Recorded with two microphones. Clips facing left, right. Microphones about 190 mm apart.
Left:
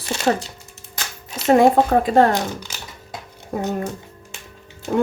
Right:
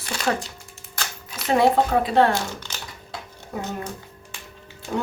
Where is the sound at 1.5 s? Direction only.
45° left (ahead or behind).